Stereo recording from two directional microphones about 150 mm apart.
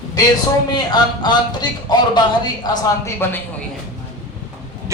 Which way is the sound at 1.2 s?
30° left (ahead or behind).